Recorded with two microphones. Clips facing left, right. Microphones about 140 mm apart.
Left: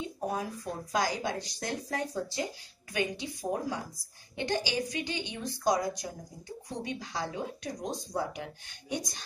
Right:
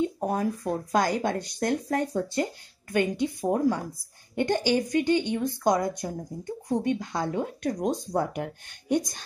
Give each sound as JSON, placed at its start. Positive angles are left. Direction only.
{"t": 0.0, "sound": "speech", "side_deg": -50}